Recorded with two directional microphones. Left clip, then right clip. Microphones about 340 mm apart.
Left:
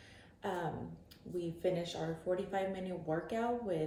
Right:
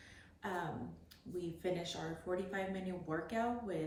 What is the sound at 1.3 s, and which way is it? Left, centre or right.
A woman's voice, centre.